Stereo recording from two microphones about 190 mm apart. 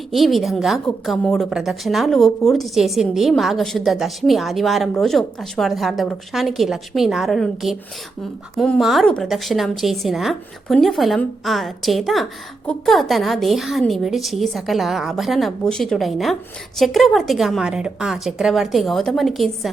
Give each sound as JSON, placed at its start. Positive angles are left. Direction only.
{"t": 0.1, "sound": "a woman's voice", "side_deg": 0}